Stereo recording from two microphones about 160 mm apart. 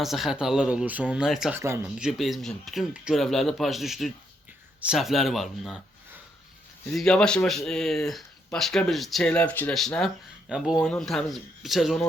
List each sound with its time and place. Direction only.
0.0 s speech: centre (ahead or behind)
1.5 s speech: 15° right (ahead or behind)
2.0 s speech: centre (ahead or behind)
6.9 s speech: 5° left (ahead or behind)